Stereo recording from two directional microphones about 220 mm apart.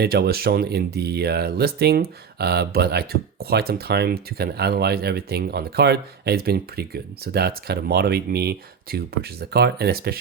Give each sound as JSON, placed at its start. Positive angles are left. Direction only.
{"t": 0.0, "sound": "speech", "side_deg": -45}